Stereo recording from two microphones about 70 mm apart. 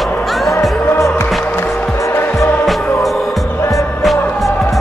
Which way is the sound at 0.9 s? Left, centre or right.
Left.